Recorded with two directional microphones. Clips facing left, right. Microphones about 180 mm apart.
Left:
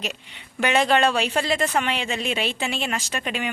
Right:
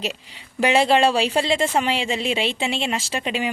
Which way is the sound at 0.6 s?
30° right (ahead or behind).